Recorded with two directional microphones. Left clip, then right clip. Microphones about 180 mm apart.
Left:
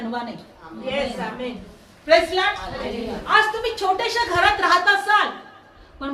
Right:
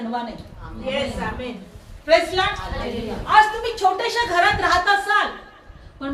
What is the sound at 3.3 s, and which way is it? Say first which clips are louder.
A woman's voice: right 3 dB; 20° left (ahead or behind).